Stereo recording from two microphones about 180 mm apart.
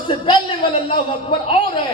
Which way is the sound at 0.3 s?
25° left (ahead or behind).